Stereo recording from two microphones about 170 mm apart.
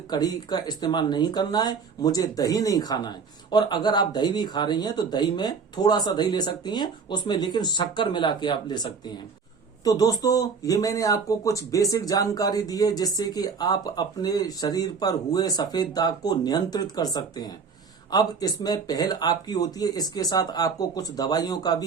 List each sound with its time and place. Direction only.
0.1 s speech: 25° left (ahead or behind)